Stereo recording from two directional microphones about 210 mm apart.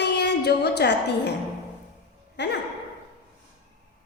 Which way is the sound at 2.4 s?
55° left (ahead or behind).